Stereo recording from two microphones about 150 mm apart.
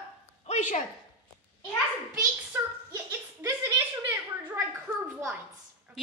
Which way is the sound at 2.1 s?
20° right (ahead or behind).